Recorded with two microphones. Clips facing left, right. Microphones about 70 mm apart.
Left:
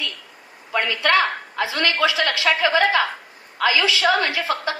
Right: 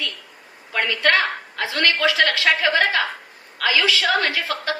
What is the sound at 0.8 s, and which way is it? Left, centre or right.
A woman's voice, left.